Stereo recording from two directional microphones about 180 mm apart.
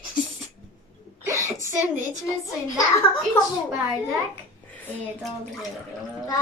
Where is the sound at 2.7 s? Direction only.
20° left (ahead or behind).